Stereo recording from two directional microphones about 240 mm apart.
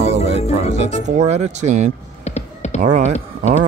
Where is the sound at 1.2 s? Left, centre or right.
Right.